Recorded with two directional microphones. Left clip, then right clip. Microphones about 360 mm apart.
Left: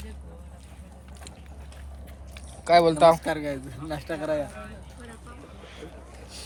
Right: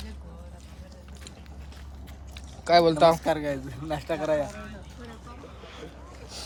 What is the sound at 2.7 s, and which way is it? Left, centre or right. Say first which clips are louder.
Speech: left 2 dB; centre.